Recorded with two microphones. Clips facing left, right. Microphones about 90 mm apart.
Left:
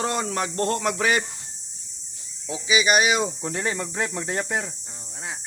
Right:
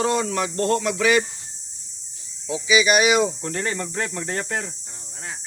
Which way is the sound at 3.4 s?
10° left (ahead or behind).